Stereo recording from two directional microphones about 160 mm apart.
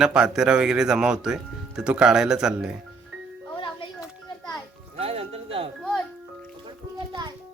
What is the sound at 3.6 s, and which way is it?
Music, 30° left (ahead or behind).